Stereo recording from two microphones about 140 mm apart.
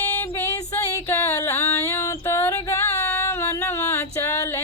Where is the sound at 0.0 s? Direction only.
15° left (ahead or behind).